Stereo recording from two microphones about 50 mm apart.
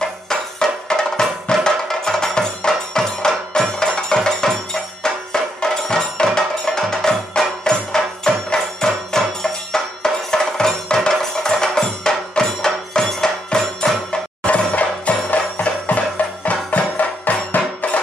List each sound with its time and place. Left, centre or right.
0.0 s music: centre
14.4 s music: left